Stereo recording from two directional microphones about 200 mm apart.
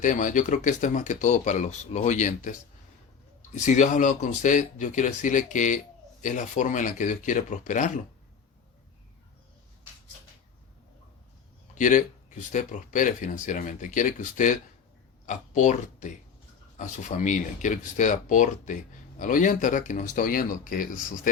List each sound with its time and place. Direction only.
0.0 s speech: 40° left (ahead or behind)
11.7 s speech: 40° left (ahead or behind)